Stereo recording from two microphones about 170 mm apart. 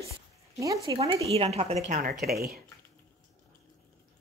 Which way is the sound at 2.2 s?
65° right (ahead or behind).